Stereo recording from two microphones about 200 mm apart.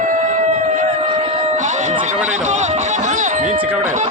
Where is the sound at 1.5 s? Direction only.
35° right (ahead or behind).